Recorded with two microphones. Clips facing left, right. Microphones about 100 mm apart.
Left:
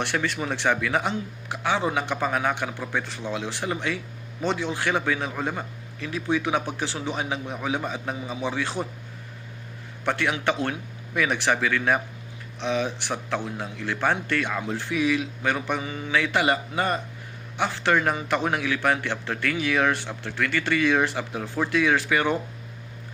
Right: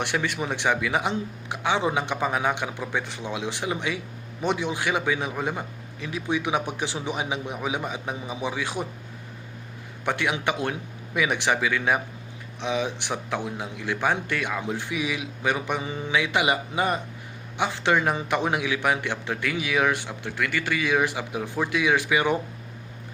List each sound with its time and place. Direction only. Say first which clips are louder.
0.0 s a man's voice: even; 15° right (ahead or behind)
10.0 s a man's voice: left 1 dB; 15° right (ahead or behind)
15.8 s speech: right 1 dB; 30° right (ahead or behind)
16.1 s a man's voice: left 1 dB; 15° right (ahead or behind)